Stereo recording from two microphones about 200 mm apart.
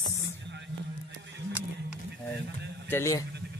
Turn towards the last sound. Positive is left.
turn(degrees=15)  # may be behind; listen again after turning